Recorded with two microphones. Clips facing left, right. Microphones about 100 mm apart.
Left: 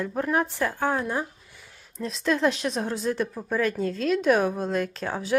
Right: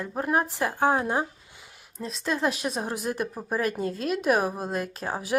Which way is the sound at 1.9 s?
Centre (ahead or behind).